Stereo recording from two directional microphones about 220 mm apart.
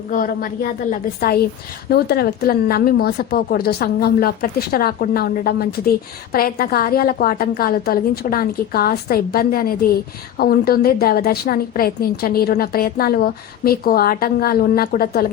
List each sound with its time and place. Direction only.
0.1 s a woman's voice: 40° left (ahead or behind)